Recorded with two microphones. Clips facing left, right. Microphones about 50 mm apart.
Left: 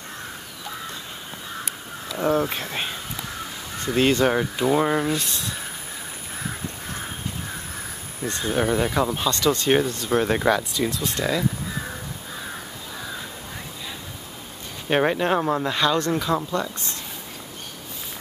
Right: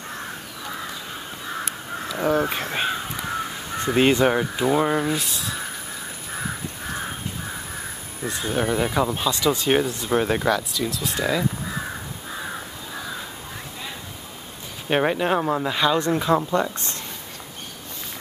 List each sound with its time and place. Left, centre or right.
2.1 s a sound: centre
2.7 s speech: centre
3.8 s speech: centre
4.3 s speech: centre
8.3 s speech: centre
10.4 s speech: centre
11.0 s speech: centre
14.9 s speech: centre